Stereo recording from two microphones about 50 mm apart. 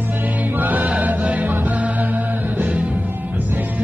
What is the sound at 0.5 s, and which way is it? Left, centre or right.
Music, right.